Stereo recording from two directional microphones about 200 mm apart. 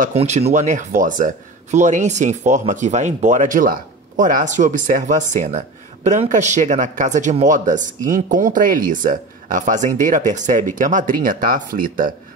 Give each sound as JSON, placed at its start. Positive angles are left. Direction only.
{"t": 0.0, "sound": "speech", "side_deg": -35}